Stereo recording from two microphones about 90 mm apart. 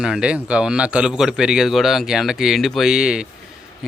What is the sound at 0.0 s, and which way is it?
Speech, 10° right (ahead or behind).